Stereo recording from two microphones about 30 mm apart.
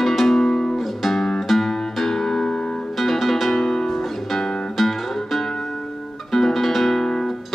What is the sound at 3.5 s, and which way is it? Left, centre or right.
Music, centre.